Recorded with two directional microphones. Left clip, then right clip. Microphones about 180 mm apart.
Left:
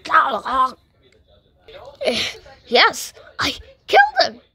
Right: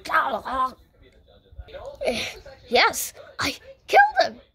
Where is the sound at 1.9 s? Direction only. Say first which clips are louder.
Left 6 dB; 15° left (ahead or behind).